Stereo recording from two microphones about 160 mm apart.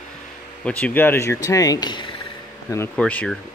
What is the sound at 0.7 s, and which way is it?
Speech, 10° left (ahead or behind).